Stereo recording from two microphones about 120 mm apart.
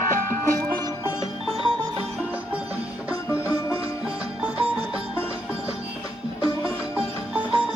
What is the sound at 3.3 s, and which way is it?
Music, 25° left (ahead or behind).